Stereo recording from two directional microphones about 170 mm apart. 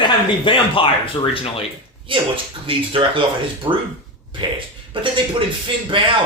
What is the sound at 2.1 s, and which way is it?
Speech, 30° right (ahead or behind).